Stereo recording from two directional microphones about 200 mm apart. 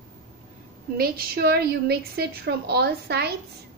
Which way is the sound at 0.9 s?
50° right (ahead or behind).